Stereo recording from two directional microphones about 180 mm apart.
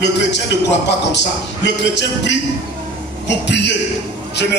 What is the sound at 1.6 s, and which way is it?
A man's voice, 75° left (ahead or behind).